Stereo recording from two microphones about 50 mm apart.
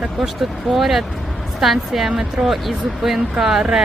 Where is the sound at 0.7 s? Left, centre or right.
Centre.